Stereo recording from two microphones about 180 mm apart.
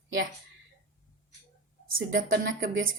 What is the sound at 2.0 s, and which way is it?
Speech, 50° right (ahead or behind).